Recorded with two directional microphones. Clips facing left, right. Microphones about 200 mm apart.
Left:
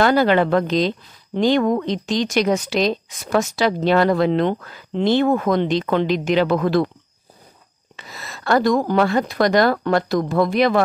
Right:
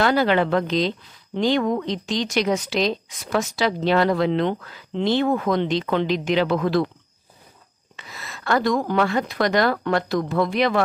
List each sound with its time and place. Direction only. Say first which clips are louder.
0.0 s speech: left 3 dB; 45° left (ahead or behind)
7.9 s speech: left 2 dB; 40° left (ahead or behind)